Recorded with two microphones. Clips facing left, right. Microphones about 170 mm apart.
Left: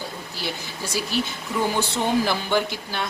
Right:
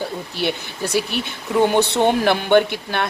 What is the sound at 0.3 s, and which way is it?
A woman's voice, 65° right (ahead or behind).